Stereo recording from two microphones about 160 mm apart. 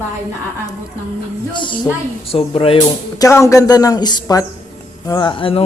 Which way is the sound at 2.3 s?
35° left (ahead or behind).